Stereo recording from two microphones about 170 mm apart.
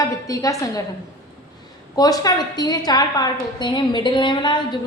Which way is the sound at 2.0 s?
20° left (ahead or behind).